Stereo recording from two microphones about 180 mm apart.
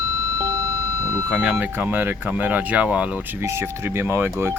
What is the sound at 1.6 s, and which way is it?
Speech, 10° right (ahead or behind).